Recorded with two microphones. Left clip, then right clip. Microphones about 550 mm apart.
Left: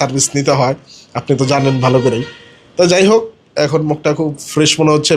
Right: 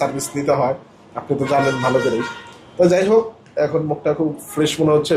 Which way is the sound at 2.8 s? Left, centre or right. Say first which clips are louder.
Left 4 dB; left.